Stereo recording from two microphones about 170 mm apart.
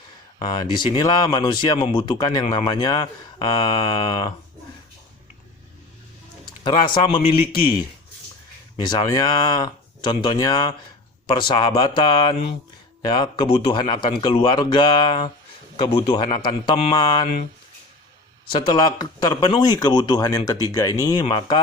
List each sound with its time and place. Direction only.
0.3 s speech: 25° left (ahead or behind)
6.7 s speech: 30° left (ahead or behind)
8.8 s speech: 25° left (ahead or behind)
18.7 s speech: 25° left (ahead or behind)